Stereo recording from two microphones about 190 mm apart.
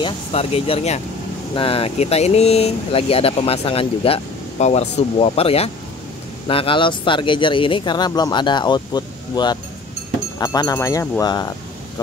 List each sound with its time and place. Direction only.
0.0 s speech: 30° left (ahead or behind)